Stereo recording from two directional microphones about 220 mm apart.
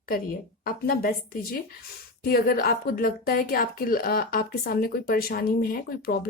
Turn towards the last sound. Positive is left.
turn(degrees=40)  # may be behind; listen again after turning